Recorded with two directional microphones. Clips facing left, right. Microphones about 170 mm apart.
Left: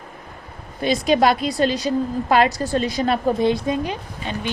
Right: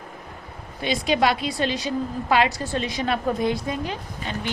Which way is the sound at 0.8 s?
45° left (ahead or behind).